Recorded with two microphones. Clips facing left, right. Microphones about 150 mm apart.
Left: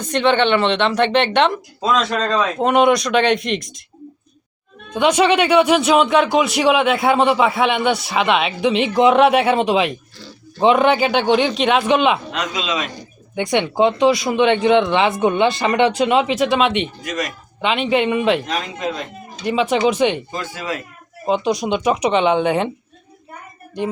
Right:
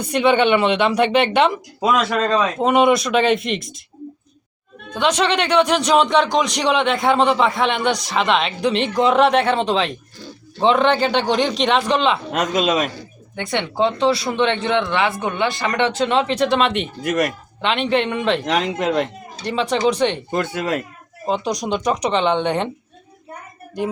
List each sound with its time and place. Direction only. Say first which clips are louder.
0.0 s speech: even; 10° right (ahead or behind)
4.9 s speech: left 4 dB; 10° left (ahead or behind)
12.3 s speech: right 5 dB; 45° right (ahead or behind)
13.0 s speech: left 5 dB; 15° left (ahead or behind)
17.0 s speech: right 5 dB; 60° right (ahead or behind)
17.6 s speech: left 1 dB; 5° left (ahead or behind)
18.4 s speech: right 4 dB; 75° right (ahead or behind)
19.7 s speech: left 1 dB; 10° left (ahead or behind)
20.3 s speech: right 5 dB; 60° right (ahead or behind)
21.2 s speech: left 3 dB; centre (ahead or behind)